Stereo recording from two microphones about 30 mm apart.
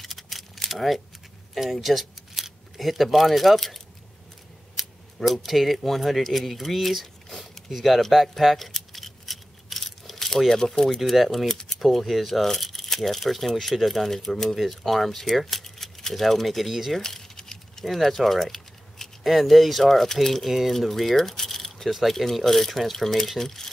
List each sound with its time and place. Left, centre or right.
0.0 s keys jangling: centre
0.7 s speech: centre
4.7 s keys jangling: centre
5.8 s speech: centre
7.2 s a sound: centre
7.7 s speech: centre
8.0 s a sound: centre
11.0 s speech: centre
14.5 s speech: centre
17.0 s a sound: centre
17.8 s speech: centre
19.2 s speech: centre
20.4 s speech: centre
20.7 s speech: centre